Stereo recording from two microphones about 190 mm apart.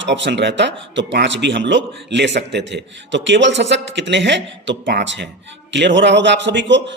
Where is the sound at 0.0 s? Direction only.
70° right (ahead or behind).